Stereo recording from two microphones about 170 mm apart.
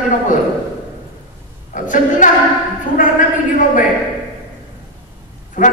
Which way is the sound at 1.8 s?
50° left (ahead or behind).